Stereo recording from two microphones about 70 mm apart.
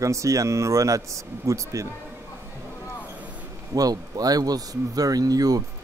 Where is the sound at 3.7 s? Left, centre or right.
Right.